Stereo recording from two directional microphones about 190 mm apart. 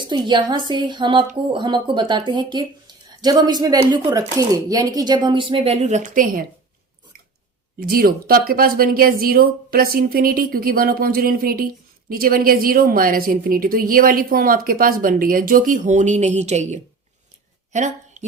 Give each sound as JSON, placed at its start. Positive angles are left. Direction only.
{"t": 0.0, "sound": "speech", "side_deg": -25}
{"t": 7.8, "sound": "a woman's voice", "side_deg": -50}
{"t": 17.7, "sound": "a sound", "side_deg": -40}